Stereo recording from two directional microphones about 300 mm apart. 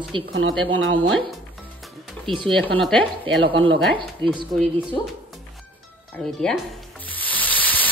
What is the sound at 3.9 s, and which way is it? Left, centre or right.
Speech, centre.